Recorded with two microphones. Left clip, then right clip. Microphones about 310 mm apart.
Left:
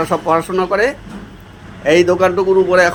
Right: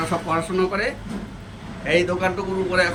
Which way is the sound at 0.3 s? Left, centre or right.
Centre.